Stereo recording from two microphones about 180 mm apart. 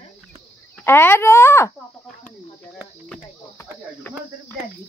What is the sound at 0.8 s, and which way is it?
Speech, 15° left (ahead or behind).